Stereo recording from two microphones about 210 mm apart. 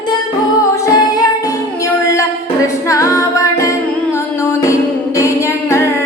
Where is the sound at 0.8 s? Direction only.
15° left (ahead or behind).